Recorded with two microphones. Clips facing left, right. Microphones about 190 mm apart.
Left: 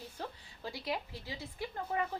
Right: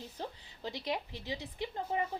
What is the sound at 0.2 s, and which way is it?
A woman's voice, 20° right (ahead or behind).